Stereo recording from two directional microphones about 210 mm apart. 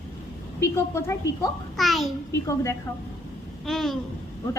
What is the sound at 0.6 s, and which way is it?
Speech, 15° left (ahead or behind).